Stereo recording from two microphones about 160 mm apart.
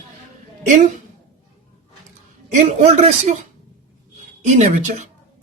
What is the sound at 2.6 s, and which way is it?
Speech, 40° right (ahead or behind).